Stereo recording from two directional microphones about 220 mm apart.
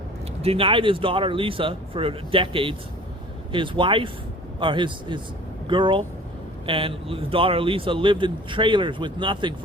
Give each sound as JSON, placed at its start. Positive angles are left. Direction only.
{"t": 0.4, "sound": "speech", "side_deg": -25}